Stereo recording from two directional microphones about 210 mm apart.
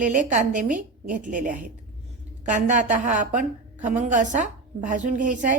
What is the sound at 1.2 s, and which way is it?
Speech, 40° right (ahead or behind).